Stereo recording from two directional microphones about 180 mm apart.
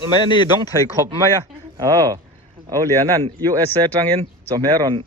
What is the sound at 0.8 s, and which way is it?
Speech, 20° left (ahead or behind).